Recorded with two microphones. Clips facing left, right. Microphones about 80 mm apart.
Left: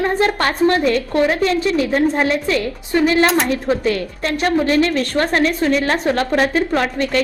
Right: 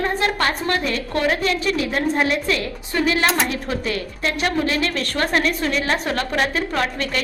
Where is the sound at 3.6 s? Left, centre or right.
Left.